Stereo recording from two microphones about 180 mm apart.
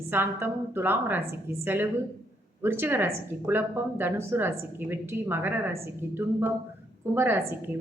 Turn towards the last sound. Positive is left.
turn(degrees=-10)  # may be behind; listen again after turning